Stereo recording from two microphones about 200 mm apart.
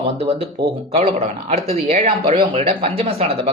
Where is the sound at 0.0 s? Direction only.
30° right (ahead or behind).